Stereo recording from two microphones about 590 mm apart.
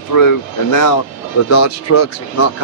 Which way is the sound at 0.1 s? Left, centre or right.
Left.